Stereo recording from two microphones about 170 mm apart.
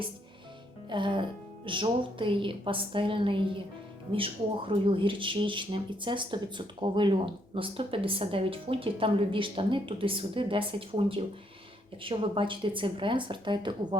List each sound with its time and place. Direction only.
0.9 s speech: 30° right (ahead or behind)